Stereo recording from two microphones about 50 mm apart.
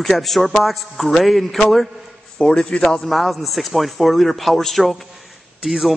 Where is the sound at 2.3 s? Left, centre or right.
Centre.